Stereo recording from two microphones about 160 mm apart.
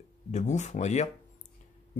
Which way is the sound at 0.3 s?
45° left (ahead or behind).